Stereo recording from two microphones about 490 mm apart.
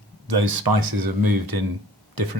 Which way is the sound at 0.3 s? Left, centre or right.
Right.